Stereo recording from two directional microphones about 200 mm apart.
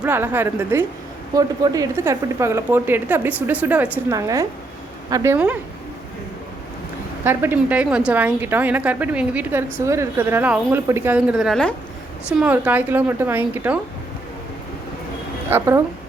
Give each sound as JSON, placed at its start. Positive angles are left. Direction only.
{"t": 0.0, "sound": "speech", "side_deg": -10}
{"t": 7.3, "sound": "speech", "side_deg": -10}
{"t": 15.4, "sound": "speech", "side_deg": -15}